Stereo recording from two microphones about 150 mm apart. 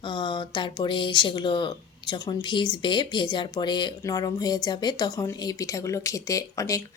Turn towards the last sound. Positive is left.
turn(degrees=20)  # may be behind; listen again after turning